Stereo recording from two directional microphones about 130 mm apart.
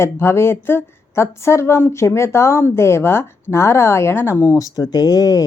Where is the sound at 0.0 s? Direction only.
20° left (ahead or behind).